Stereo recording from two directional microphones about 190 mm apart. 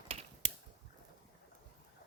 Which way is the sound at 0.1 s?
35° right (ahead or behind).